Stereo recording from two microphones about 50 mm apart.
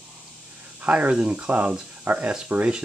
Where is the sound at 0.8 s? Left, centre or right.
Right.